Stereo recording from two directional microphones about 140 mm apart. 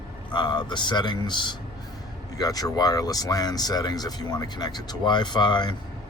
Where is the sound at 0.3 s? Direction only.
30° left (ahead or behind).